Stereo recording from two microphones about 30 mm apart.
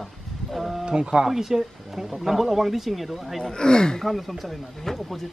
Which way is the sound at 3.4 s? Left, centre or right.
Left.